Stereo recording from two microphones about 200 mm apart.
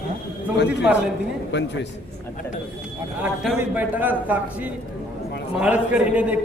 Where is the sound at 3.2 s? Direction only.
5° right (ahead or behind).